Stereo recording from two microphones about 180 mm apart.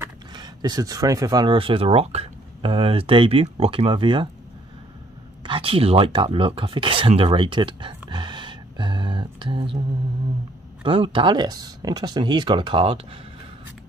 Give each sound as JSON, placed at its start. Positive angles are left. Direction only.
{"t": 0.3, "sound": "speech", "side_deg": -20}
{"t": 5.4, "sound": "a sound", "side_deg": -30}
{"t": 10.8, "sound": "speech", "side_deg": -30}